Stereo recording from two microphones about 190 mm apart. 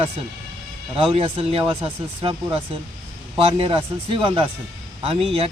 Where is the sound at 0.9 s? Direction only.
30° right (ahead or behind).